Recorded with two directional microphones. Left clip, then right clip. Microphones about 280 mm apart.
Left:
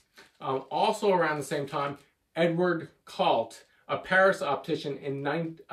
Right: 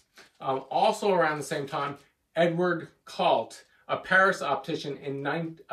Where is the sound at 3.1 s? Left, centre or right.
Centre.